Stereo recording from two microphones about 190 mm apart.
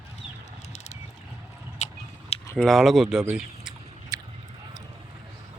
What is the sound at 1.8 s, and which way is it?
Horse, 35° left (ahead or behind).